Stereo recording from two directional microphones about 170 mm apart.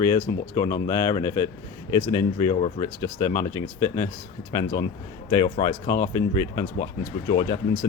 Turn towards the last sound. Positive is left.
turn(degrees=25)  # may be behind; listen again after turning